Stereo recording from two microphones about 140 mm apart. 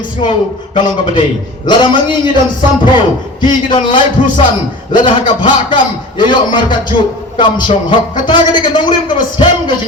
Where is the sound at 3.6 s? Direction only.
35° left (ahead or behind).